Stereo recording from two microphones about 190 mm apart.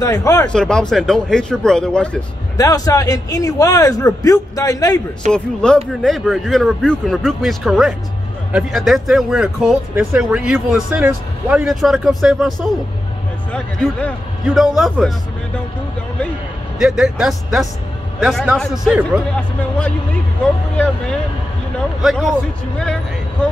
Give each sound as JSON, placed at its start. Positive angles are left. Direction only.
{"t": 0.0, "sound": "speech", "side_deg": 20}
{"t": 0.5, "sound": "speech", "side_deg": 5}
{"t": 2.5, "sound": "a man's voice", "side_deg": 20}
{"t": 5.3, "sound": "speech", "side_deg": 5}
{"t": 16.7, "sound": "speech", "side_deg": 0}
{"t": 20.7, "sound": "speech", "side_deg": 5}